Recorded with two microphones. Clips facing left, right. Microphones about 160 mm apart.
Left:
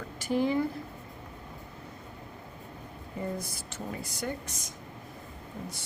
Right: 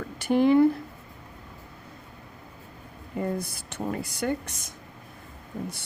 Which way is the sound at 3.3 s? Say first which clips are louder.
Right 5 dB; 60° right (ahead or behind).